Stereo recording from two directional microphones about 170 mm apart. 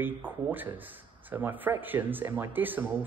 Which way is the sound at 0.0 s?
10° right (ahead or behind).